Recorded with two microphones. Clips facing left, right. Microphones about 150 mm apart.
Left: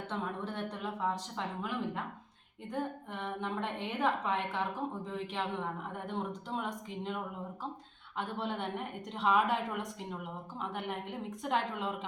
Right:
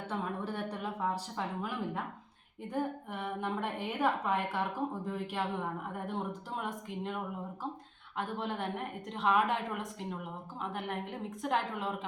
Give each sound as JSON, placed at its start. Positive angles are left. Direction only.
{"t": 0.1, "sound": "a sound", "side_deg": -10}
{"t": 2.7, "sound": "a woman's voice", "side_deg": -10}
{"t": 8.2, "sound": "a woman's voice", "side_deg": 0}